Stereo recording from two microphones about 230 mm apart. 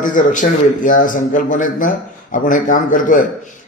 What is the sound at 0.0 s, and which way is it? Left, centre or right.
A man's voice, left.